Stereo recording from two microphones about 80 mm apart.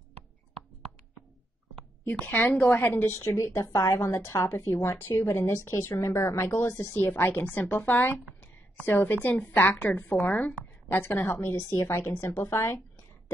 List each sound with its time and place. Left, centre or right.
2.0 s a woman's voice: left
11.1 s a woman's voice: left